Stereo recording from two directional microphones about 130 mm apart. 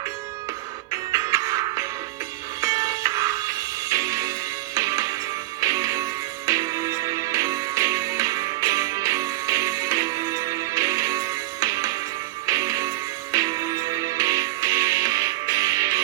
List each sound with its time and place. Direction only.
1.1 s music: 25° right (ahead or behind)